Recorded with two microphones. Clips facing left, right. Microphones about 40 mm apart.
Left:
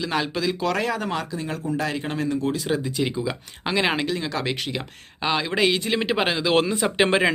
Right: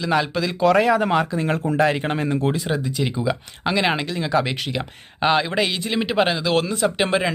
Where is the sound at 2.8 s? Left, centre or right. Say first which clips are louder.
Right 2 dB; centre.